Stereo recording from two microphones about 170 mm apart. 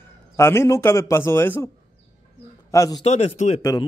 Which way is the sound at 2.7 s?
20° left (ahead or behind).